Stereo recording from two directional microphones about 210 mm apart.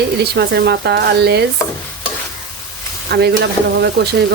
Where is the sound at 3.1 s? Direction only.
50° right (ahead or behind).